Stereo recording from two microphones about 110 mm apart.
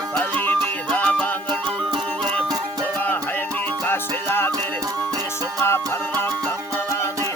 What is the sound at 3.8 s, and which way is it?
Music, 20° left (ahead or behind).